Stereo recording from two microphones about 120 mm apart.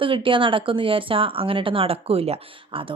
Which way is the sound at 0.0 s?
45° right (ahead or behind).